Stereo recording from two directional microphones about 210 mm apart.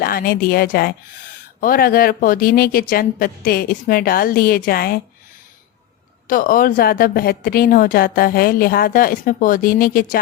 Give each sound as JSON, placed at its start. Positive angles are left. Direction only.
{"t": 0.0, "sound": "a woman's voice", "side_deg": 45}
{"t": 6.2, "sound": "a woman's voice", "side_deg": 40}